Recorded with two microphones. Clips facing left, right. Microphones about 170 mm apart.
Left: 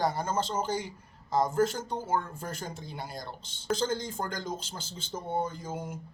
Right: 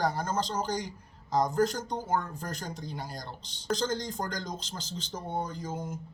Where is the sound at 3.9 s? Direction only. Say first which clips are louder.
Even; 5° left (ahead or behind).